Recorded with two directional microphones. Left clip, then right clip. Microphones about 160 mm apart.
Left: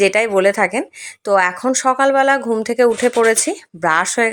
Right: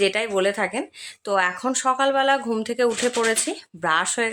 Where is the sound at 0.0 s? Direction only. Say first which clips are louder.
Left 8 dB; 40° left (ahead or behind).